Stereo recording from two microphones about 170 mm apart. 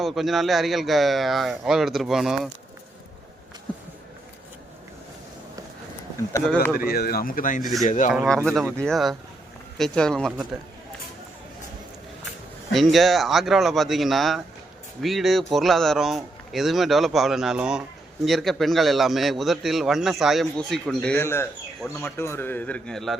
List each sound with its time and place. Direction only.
0.0 s a man's voice: centre (ahead or behind)
6.4 s speech: 5° left (ahead or behind)
6.7 s speech: 60° left (ahead or behind)
8.1 s a man's voice: centre (ahead or behind)
12.7 s a man's voice: centre (ahead or behind)